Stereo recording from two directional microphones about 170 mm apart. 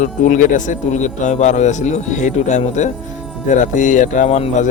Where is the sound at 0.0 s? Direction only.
50° left (ahead or behind).